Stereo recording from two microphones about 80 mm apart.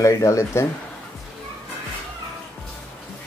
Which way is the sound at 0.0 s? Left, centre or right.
Left.